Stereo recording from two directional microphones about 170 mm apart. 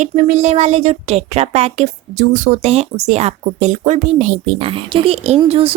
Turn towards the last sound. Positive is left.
turn(degrees=-30)  # may be behind; listen again after turning